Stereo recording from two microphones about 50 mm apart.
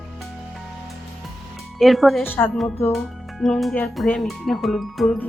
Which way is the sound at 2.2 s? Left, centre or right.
Left.